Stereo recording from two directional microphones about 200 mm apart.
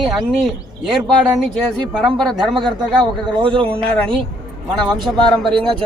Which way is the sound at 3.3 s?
25° right (ahead or behind).